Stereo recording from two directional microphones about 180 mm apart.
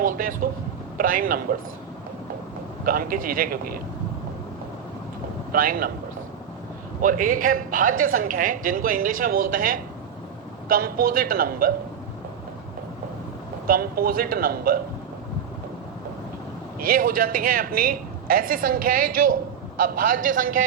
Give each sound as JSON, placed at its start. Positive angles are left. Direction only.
{"t": 0.0, "sound": "a woman's voice", "side_deg": -50}
{"t": 2.8, "sound": "a woman's voice", "side_deg": -50}
{"t": 5.5, "sound": "speech", "side_deg": -50}
{"t": 7.0, "sound": "a woman's voice", "side_deg": -50}
{"t": 13.7, "sound": "a woman's voice", "side_deg": -55}
{"t": 16.8, "sound": "a woman's voice", "side_deg": -50}